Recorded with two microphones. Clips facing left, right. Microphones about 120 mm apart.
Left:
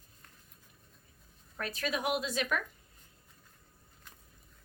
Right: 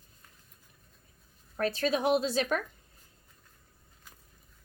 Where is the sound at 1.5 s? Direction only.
30° right (ahead or behind).